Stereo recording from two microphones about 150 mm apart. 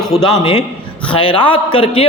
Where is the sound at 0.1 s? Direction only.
30° left (ahead or behind).